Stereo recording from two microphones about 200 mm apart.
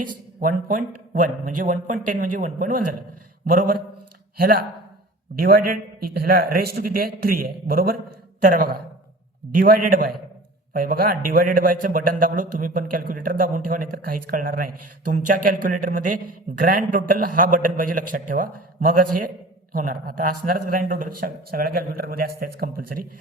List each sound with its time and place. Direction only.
0.3 s a man's voice: 40° right (ahead or behind)